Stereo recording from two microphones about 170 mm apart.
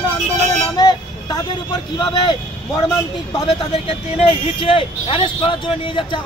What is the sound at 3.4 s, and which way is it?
Speech, 35° left (ahead or behind).